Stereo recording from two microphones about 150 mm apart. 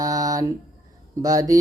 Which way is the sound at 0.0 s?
25° right (ahead or behind).